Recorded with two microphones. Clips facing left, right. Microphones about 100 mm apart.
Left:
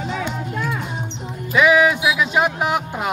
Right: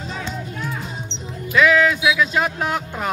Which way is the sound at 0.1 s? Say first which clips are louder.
Left 4 dB; 20° left (ahead or behind).